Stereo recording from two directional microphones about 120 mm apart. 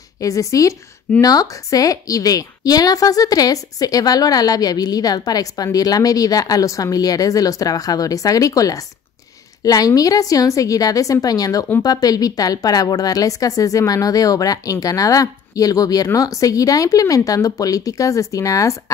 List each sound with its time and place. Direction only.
0.2 s a woman's voice: 25° left (ahead or behind)